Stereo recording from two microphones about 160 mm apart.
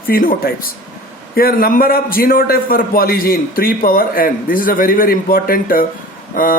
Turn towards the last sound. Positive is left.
turn(degrees=60)  # may be behind; listen again after turning